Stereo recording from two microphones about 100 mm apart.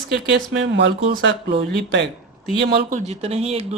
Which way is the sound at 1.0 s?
75° right (ahead or behind).